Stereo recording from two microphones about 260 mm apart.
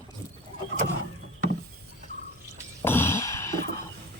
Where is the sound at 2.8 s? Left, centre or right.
Centre.